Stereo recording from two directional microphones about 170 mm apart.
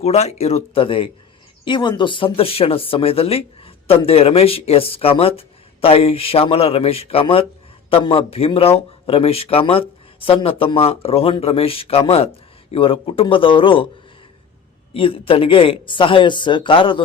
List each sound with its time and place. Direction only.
0.0 s speech: 40° left (ahead or behind)
14.9 s speech: 30° left (ahead or behind)